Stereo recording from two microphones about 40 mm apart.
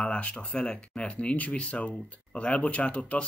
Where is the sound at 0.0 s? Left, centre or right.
Left.